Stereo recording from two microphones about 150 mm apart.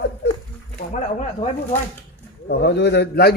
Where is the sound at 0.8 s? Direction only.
55° left (ahead or behind).